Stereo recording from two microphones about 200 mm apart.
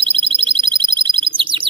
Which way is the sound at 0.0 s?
25° right (ahead or behind).